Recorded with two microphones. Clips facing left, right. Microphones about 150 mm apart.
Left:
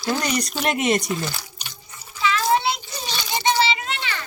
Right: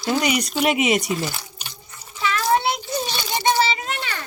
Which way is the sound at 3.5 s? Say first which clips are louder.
Right 1 dB; 45° right (ahead or behind).